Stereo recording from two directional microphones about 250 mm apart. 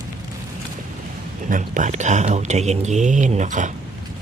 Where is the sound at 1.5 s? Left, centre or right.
Right.